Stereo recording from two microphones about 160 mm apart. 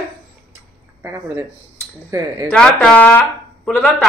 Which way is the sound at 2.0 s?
20° right (ahead or behind).